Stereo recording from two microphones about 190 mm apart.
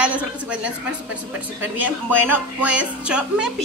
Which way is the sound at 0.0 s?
5° right (ahead or behind).